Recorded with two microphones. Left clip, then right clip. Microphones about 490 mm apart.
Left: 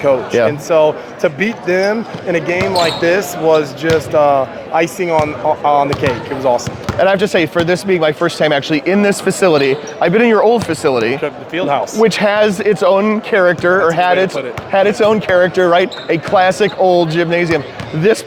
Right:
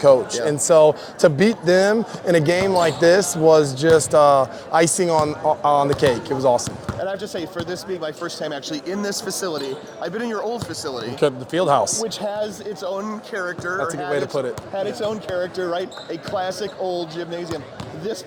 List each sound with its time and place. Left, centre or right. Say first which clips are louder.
0.7 s speech: right 2 dB; right
7.0 s speech: left 15 dB; left
9.0 s speech: left 12 dB; left
9.6 s speech: left 14 dB; left
11.2 s speech: left 1 dB; right
12.0 s speech: left 14 dB; left
17.2 s speech: left 14 dB; left